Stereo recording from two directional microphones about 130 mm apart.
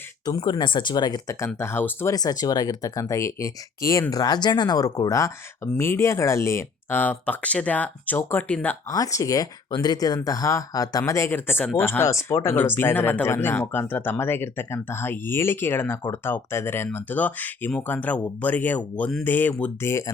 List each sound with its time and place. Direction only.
0.3 s speech: 30° left (ahead or behind)
1.5 s speech: 20° left (ahead or behind)
2.1 s speech: 30° left (ahead or behind); by 8.7 s 10° left (ahead or behind)
8.9 s speech: 25° left (ahead or behind)